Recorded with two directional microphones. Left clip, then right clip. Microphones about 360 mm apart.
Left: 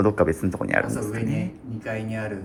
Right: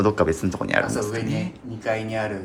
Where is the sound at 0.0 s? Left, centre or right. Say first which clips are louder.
Even; centre.